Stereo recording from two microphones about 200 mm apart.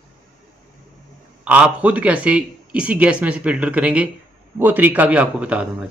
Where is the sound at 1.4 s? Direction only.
5° right (ahead or behind).